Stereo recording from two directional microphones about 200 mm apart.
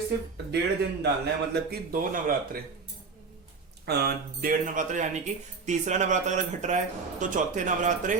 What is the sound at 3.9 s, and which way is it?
Speech, 45° right (ahead or behind).